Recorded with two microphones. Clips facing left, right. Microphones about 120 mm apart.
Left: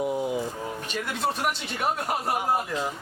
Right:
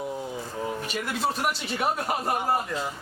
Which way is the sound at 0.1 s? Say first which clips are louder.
Left 6 dB; 15° left (ahead or behind).